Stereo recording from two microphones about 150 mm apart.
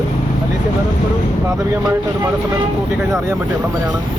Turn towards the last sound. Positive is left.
turn(degrees=-20)  # may be behind; listen again after turning